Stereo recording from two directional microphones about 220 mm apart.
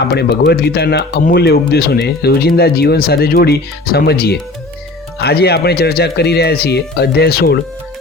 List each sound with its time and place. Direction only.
0.1 s speech: 45° left (ahead or behind)